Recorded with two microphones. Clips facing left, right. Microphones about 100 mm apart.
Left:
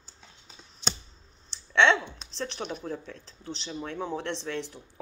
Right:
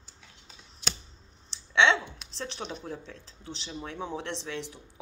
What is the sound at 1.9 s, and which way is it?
Speech, 20° right (ahead or behind).